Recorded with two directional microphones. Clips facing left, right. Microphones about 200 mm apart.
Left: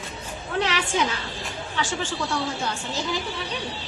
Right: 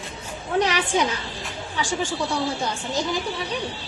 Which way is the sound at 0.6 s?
15° right (ahead or behind).